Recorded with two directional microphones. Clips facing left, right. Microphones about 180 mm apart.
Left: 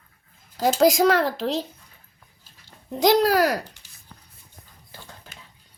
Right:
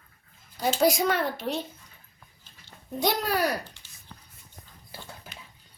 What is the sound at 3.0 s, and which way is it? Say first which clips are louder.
Speech: left 8 dB; 90° left.